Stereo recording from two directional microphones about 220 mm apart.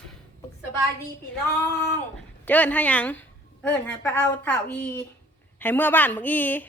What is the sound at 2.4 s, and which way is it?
A woman's voice, 10° left (ahead or behind).